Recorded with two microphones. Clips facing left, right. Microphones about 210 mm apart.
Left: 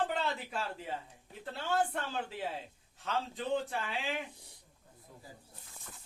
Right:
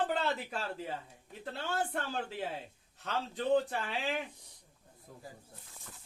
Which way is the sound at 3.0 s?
40° right (ahead or behind).